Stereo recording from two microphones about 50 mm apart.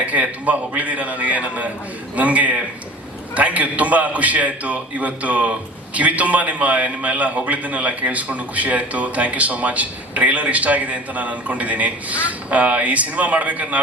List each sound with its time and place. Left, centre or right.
0.0 s a man's voice: right